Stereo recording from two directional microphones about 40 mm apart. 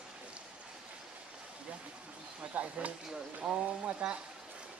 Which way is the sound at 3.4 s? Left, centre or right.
Right.